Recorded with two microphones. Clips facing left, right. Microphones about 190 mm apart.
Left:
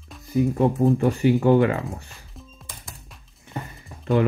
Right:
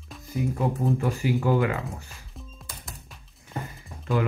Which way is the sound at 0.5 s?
30° left (ahead or behind).